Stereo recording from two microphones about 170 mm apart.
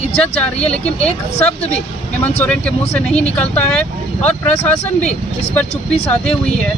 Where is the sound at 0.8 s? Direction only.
35° left (ahead or behind).